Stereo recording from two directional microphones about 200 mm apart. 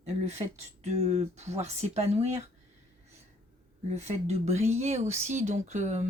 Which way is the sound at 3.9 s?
35° right (ahead or behind).